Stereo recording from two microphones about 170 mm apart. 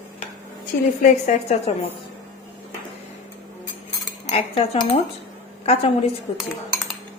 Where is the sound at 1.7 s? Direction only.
40° left (ahead or behind).